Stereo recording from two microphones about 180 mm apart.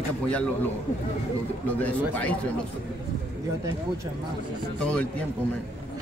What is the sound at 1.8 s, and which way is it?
Speech, 10° left (ahead or behind).